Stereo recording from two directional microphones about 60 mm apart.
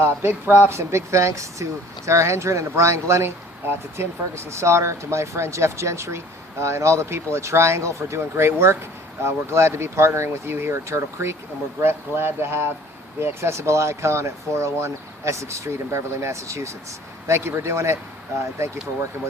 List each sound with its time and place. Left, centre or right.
0.2 s speech: right
0.7 s speech: right